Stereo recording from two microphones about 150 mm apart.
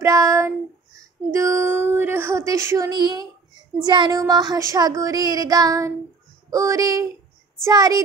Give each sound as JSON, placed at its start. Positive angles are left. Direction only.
{"t": 0.0, "sound": "child singing", "side_deg": -20}
{"t": 1.3, "sound": "a sound", "side_deg": -20}
{"t": 3.8, "sound": "child singing", "side_deg": -30}